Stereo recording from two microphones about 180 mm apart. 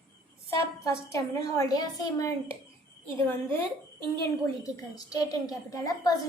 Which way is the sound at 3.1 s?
30° right (ahead or behind).